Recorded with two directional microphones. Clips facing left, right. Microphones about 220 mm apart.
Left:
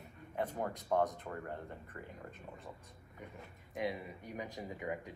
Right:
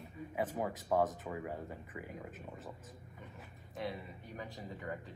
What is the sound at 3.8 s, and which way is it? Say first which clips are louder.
Speech: left 3 dB; 15° left (ahead or behind).